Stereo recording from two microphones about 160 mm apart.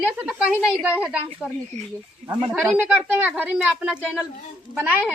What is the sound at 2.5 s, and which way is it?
A woman's voice, 10° right (ahead or behind).